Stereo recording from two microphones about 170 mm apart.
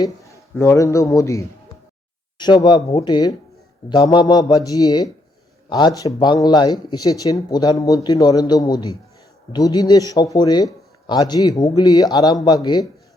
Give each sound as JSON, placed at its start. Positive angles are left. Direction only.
{"t": 0.0, "sound": "a man's voice", "side_deg": 15}